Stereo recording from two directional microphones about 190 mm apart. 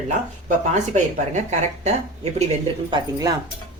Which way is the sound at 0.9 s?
40° right (ahead or behind).